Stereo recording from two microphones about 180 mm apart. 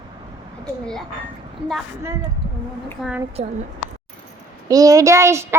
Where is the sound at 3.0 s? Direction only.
5° right (ahead or behind).